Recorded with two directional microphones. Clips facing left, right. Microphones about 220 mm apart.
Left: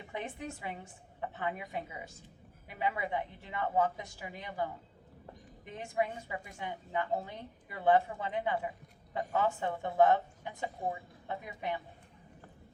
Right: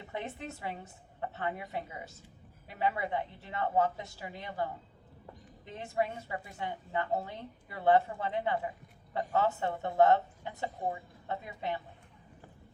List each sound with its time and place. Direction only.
0.1 s speech: 15° left (ahead or behind)